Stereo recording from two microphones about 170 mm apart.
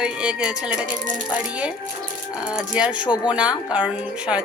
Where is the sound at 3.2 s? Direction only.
5° right (ahead or behind).